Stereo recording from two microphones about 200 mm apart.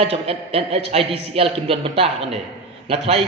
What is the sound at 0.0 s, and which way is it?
A man's voice, 30° right (ahead or behind).